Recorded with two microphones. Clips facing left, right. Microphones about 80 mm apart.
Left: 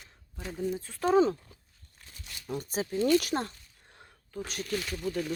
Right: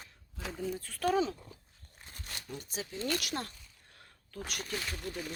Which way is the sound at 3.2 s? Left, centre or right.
Left.